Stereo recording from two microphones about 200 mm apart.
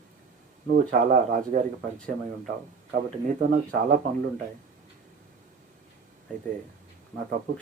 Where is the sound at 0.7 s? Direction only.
40° right (ahead or behind).